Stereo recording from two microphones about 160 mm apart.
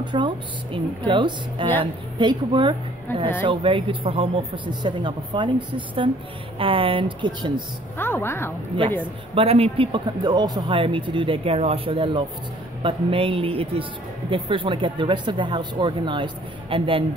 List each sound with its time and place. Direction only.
0.0 s a woman's voice: 30° right (ahead or behind)
3.1 s a woman's voice: 15° left (ahead or behind)
3.4 s speech: 30° right (ahead or behind)
8.0 s a woman's voice: 15° left (ahead or behind)
9.3 s speech: 40° right (ahead or behind)